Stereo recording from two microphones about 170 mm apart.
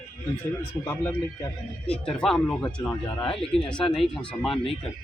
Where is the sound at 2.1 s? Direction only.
5° left (ahead or behind).